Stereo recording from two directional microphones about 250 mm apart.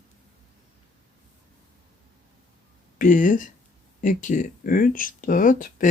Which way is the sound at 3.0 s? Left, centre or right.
Left.